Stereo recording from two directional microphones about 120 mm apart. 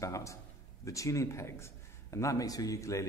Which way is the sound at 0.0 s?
25° left (ahead or behind).